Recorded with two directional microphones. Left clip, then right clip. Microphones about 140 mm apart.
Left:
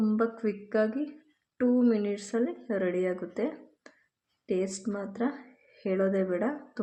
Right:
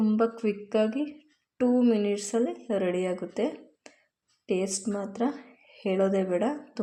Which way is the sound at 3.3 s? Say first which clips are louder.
Right 3 dB; 15° right (ahead or behind).